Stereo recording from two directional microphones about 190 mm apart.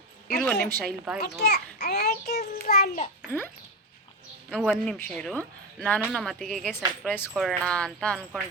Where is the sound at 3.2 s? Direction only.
10° left (ahead or behind).